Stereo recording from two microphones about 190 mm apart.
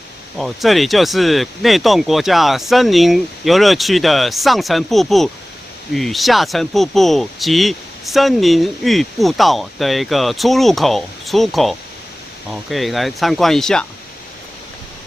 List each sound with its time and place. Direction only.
0.3 s speech: centre (ahead or behind)